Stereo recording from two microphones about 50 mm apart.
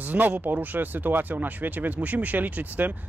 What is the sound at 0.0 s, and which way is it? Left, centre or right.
Speech, right.